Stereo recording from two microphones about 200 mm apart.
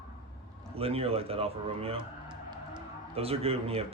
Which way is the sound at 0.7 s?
30° right (ahead or behind).